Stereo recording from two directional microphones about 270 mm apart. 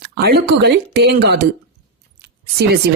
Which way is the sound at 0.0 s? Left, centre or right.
Right.